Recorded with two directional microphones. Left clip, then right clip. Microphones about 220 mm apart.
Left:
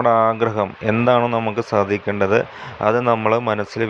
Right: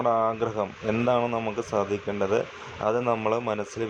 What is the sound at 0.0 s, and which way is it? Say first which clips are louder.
Speech: left 8 dB; 15° left (ahead or behind).